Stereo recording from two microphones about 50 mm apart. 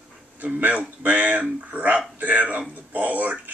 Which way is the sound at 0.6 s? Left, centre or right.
Right.